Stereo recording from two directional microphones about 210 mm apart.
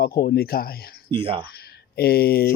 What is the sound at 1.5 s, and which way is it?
Speech, 50° left (ahead or behind).